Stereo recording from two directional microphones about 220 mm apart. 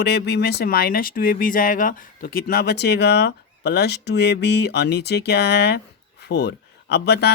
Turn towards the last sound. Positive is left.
turn(degrees=50)  # may be behind; listen again after turning